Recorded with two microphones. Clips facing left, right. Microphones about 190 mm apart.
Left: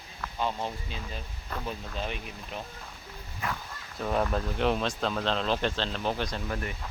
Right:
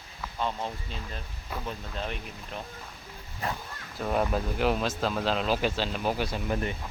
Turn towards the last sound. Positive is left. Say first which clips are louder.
# right 4 dB
turn(degrees=-25)  # may be behind; listen again after turning